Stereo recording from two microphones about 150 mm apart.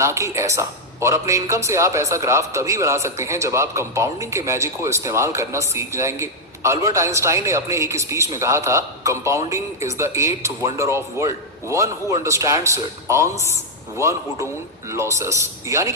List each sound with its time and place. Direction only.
0.0 s a woman's voice: 20° right (ahead or behind)